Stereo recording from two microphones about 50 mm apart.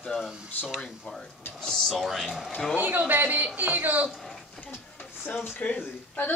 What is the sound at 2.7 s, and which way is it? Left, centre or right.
A man's voice, right.